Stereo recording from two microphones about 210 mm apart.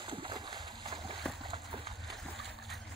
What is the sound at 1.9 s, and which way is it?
Splash, centre (ahead or behind).